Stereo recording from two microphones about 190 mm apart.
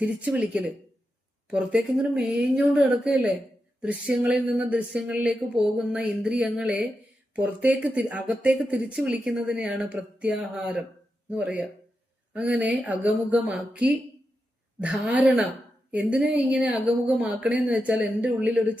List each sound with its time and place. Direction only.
0.0 s speech: 5° right (ahead or behind)